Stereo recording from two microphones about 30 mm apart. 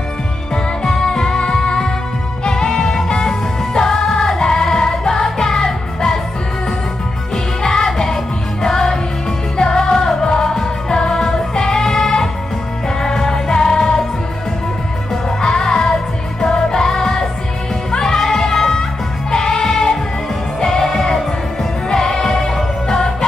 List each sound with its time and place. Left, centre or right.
0.8 s music: left
7.6 s music: centre
15.4 s music: left